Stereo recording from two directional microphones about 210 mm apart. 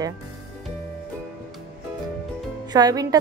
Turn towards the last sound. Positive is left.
turn(degrees=-15)  # may be behind; listen again after turning